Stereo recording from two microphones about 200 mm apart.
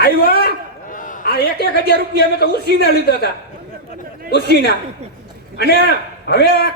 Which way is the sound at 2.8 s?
50° left (ahead or behind).